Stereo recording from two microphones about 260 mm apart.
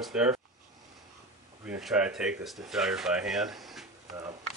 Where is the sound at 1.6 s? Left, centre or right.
Centre.